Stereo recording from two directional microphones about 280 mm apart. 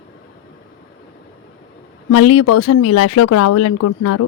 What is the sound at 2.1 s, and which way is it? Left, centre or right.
Speech, left.